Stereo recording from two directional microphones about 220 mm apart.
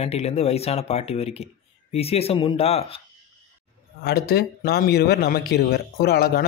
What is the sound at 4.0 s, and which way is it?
Speech, 45° left (ahead or behind).